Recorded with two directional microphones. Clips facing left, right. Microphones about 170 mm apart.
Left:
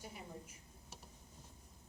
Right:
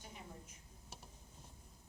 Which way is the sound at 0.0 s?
5° left (ahead or behind).